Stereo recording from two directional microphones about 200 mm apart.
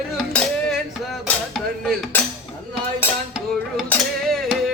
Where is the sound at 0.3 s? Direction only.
Centre (ahead or behind).